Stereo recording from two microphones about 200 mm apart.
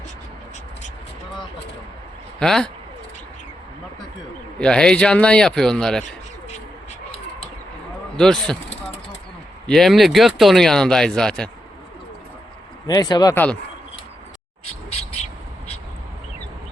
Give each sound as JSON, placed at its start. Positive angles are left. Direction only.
{"t": 2.4, "sound": "speech", "side_deg": 5}
{"t": 4.6, "sound": "speech", "side_deg": 5}
{"t": 8.2, "sound": "speech", "side_deg": 5}
{"t": 9.6, "sound": "speech", "side_deg": 0}
{"t": 12.9, "sound": "speech", "side_deg": 20}